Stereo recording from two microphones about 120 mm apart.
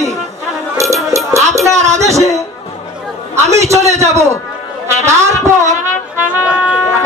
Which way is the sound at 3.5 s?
25° right (ahead or behind).